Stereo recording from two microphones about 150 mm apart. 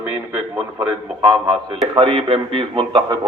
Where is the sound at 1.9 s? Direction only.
35° right (ahead or behind).